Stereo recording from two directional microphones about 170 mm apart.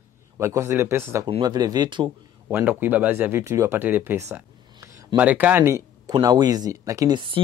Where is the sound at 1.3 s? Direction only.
30° right (ahead or behind).